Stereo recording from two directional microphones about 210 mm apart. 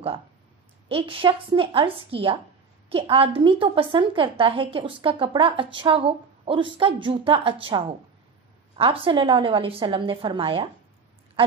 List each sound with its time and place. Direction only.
0.8 s a woman's voice: 25° right (ahead or behind)